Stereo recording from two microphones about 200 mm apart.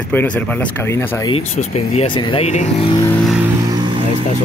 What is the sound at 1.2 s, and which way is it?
Speech, 30° left (ahead or behind).